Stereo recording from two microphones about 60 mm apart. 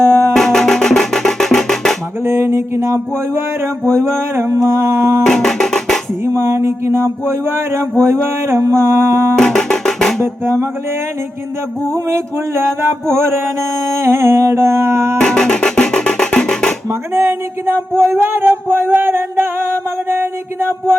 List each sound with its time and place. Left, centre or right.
0.3 s music: centre
2.2 s music: right
5.2 s music: centre
6.2 s speech: right
9.4 s music: centre
10.2 s speech: right
11.9 s speech: right
15.2 s music: centre
16.9 s speech: right